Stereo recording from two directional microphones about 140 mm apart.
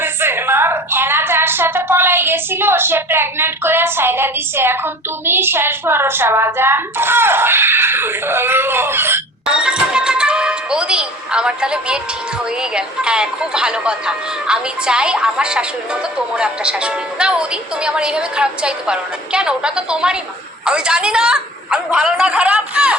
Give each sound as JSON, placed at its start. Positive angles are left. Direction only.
{"t": 0.0, "sound": "a woman's voice", "side_deg": -15}
{"t": 9.5, "sound": "music", "side_deg": -5}
{"t": 12.7, "sound": "a woman's voice", "side_deg": -5}